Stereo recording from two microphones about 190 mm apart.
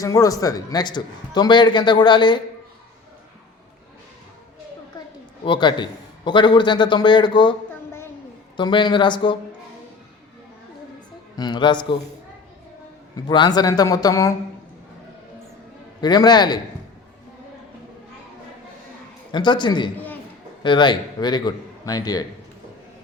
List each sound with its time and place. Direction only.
0.0 s a man's voice: 20° left (ahead or behind)
4.9 s a sound: 20° left (ahead or behind)
5.5 s a man's voice: 25° left (ahead or behind)
8.5 s a man's voice: 25° left (ahead or behind)
11.3 s a man's voice: 25° left (ahead or behind)
13.1 s a man's voice: 25° left (ahead or behind)
16.0 s a man's voice: 20° left (ahead or behind)
19.3 s a man's voice: 25° left (ahead or behind)